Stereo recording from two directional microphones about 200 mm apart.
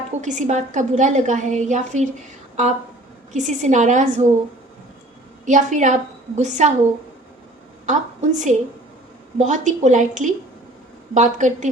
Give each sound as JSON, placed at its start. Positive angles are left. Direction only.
{"t": 0.1, "sound": "a woman's voice", "side_deg": -35}
{"t": 3.3, "sound": "a woman's voice", "side_deg": -35}
{"t": 5.5, "sound": "a woman's voice", "side_deg": -35}
{"t": 7.9, "sound": "a woman's voice", "side_deg": -35}